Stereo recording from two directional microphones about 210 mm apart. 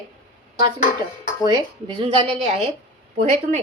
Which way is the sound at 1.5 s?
20° right (ahead or behind).